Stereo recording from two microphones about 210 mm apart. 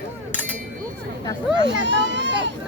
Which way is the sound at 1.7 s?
60° right (ahead or behind).